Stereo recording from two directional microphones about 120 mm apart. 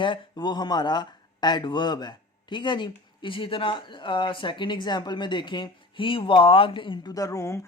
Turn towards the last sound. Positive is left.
turn(degrees=25)  # may be behind; listen again after turning